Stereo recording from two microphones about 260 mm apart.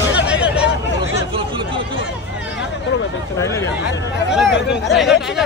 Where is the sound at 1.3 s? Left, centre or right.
Centre.